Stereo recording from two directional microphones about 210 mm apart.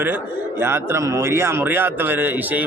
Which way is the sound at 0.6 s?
10° right (ahead or behind).